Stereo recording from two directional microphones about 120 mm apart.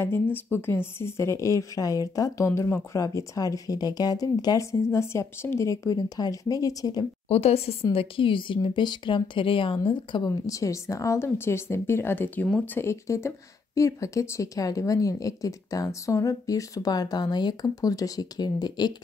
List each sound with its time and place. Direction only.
0.0 s speech: 20° left (ahead or behind)
7.2 s speech: 60° left (ahead or behind); by 18.9 s 35° left (ahead or behind)